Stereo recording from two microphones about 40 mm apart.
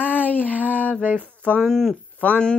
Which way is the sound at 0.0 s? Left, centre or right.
Left.